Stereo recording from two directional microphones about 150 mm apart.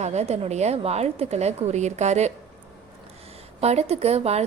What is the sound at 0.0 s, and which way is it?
A woman's voice, 50° right (ahead or behind).